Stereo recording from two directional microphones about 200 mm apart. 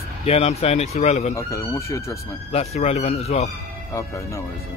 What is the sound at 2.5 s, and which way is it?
Speech, 30° left (ahead or behind).